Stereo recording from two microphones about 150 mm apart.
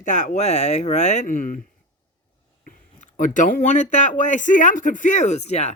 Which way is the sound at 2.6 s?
60° left (ahead or behind).